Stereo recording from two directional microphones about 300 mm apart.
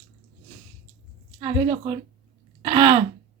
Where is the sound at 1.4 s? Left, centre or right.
Centre.